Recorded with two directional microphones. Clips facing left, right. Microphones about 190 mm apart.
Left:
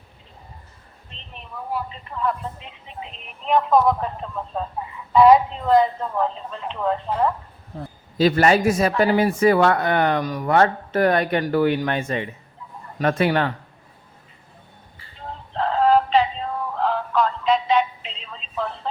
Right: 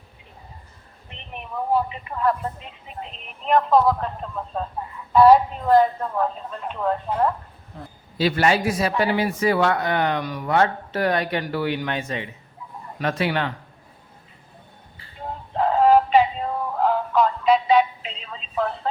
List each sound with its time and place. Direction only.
1.9 s a woman's voice: 10° right (ahead or behind)
3.8 s speech: 10° left (ahead or behind)
4.2 s a woman's voice: centre (ahead or behind)
8.2 s speech: 45° left (ahead or behind)
15.5 s synthetic singing: 10° right (ahead or behind)